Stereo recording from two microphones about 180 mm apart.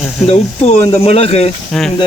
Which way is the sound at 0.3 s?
35° left (ahead or behind).